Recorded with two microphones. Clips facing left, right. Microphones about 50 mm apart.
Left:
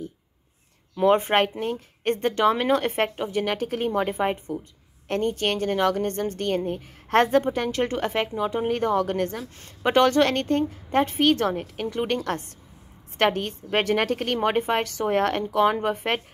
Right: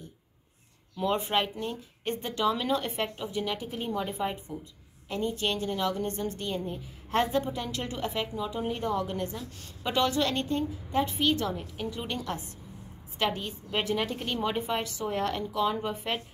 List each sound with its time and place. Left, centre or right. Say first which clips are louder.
0.9 s a woman's voice: left 8 dB; left
5.0 s a woman's voice: left 6 dB; left